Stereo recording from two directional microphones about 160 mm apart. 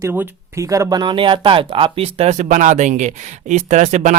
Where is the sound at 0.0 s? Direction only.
15° right (ahead or behind).